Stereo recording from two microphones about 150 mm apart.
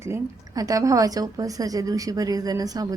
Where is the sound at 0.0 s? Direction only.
20° right (ahead or behind).